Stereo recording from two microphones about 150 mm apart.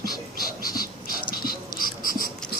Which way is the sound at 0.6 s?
25° left (ahead or behind).